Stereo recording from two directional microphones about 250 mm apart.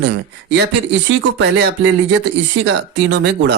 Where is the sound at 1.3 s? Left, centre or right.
Right.